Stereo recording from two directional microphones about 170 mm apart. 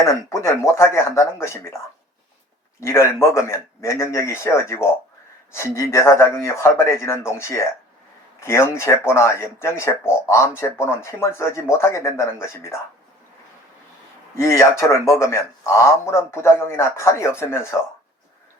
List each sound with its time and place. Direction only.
0.3 s speech: 15° left (ahead or behind)
2.8 s speech: 15° left (ahead or behind)
14.3 s speech: 15° left (ahead or behind)